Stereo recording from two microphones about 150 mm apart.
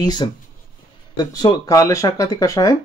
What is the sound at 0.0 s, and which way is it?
Speech, 25° left (ahead or behind).